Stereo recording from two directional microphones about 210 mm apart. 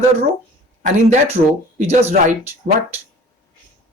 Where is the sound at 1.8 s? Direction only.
30° right (ahead or behind).